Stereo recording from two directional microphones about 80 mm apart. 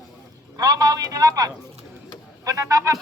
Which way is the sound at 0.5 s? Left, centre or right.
Right.